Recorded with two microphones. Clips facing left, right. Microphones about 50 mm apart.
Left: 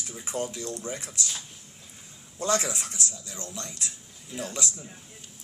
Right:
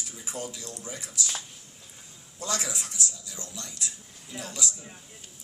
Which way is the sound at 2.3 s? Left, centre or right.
Left.